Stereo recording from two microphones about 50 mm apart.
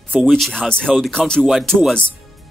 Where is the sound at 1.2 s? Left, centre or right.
Centre.